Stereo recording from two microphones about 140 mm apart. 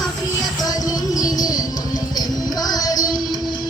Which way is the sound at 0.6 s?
25° left (ahead or behind).